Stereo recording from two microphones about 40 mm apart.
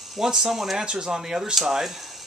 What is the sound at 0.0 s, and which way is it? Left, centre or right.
Speech, centre.